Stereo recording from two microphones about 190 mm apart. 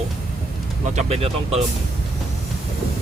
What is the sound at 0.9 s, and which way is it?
Speech, 35° right (ahead or behind).